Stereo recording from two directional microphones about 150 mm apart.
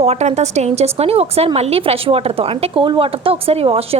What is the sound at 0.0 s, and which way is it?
A woman's voice, 45° right (ahead or behind).